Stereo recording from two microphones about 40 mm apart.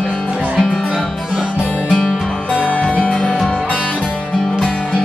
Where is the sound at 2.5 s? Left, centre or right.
Left.